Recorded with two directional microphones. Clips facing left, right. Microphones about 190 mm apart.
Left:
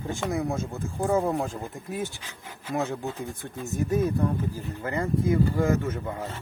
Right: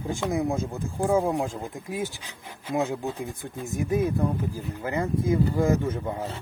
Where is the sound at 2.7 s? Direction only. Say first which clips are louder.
Right 2 dB; 10° right (ahead or behind).